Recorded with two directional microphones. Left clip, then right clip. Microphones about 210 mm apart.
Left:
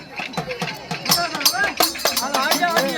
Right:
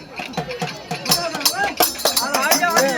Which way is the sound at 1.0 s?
15° right (ahead or behind).